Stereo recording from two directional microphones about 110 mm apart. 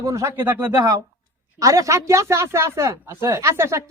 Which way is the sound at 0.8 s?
35° right (ahead or behind).